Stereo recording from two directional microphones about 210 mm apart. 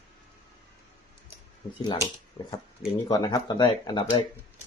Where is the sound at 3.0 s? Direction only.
20° left (ahead or behind).